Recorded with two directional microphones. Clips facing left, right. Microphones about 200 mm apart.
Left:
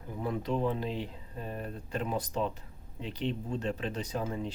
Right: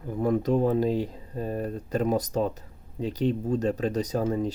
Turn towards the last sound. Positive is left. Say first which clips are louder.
# right 8 dB
turn(degrees=-40)  # may be behind; listen again after turning